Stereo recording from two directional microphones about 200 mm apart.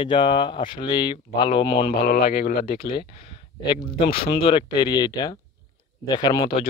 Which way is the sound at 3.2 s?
25° left (ahead or behind).